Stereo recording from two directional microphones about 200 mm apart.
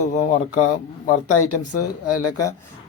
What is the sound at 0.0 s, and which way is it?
Speech, 40° left (ahead or behind).